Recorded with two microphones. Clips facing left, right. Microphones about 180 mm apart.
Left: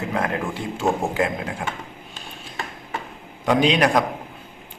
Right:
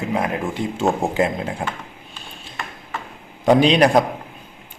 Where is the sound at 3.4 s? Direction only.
30° right (ahead or behind).